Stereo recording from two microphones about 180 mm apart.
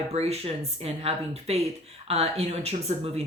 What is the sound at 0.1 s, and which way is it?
Speech, 35° right (ahead or behind).